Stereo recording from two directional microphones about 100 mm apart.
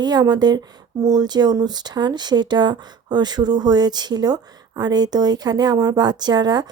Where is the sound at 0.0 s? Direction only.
45° right (ahead or behind).